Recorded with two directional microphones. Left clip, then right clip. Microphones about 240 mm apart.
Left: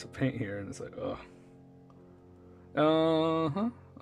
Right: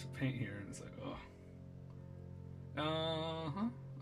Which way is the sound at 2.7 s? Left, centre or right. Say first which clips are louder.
Left 13 dB; left.